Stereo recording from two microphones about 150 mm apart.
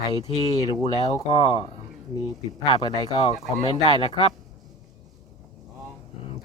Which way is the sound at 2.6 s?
30° left (ahead or behind).